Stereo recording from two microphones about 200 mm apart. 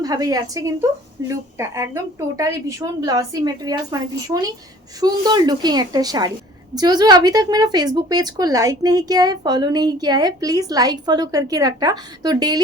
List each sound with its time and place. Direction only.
0.0 s a woman's voice: 20° right (ahead or behind)